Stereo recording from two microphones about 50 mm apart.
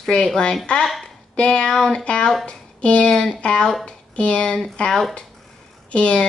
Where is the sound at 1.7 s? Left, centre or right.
Centre.